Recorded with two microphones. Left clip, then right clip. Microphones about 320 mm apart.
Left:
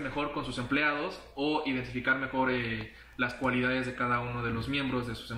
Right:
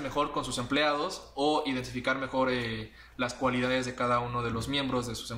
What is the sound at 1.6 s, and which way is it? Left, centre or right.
Speech, centre.